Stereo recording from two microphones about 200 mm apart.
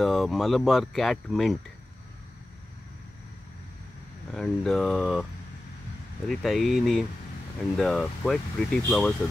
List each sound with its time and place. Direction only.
0.0 s speech: centre (ahead or behind)
4.3 s speech: centre (ahead or behind)
6.2 s speech: centre (ahead or behind)